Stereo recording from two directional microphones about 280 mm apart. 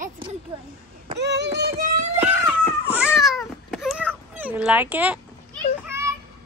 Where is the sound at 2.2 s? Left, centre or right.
Centre.